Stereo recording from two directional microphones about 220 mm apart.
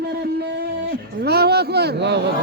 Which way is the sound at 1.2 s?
45° right (ahead or behind).